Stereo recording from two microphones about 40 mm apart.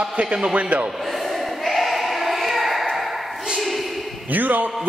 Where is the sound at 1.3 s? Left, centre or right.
Centre.